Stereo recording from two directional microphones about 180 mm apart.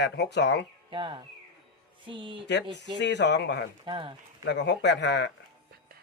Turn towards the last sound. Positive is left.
turn(degrees=75)  # may be behind; listen again after turning